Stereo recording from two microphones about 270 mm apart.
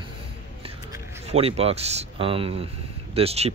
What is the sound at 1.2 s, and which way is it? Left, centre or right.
Speech, right.